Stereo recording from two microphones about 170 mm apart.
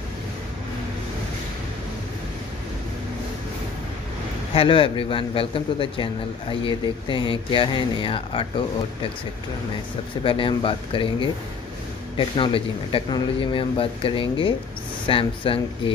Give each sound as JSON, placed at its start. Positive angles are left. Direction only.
{"t": 4.6, "sound": "speech", "side_deg": 30}
{"t": 10.2, "sound": "speech", "side_deg": 30}